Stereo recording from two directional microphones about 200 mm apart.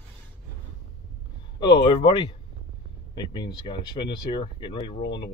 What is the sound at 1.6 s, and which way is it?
Speech, 25° left (ahead or behind).